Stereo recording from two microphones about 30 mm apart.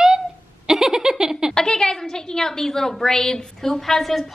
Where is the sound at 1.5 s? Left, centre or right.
Left.